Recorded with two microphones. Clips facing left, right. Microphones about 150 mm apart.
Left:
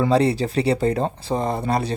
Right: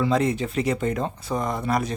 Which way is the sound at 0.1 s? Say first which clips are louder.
Left 4 dB; 35° left (ahead or behind).